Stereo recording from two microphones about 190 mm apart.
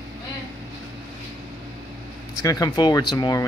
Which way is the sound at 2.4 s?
20° left (ahead or behind).